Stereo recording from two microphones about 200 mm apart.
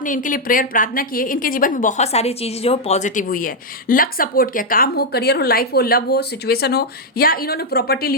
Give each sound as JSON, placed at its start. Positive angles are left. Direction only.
{"t": 0.0, "sound": "a woman's voice", "side_deg": 40}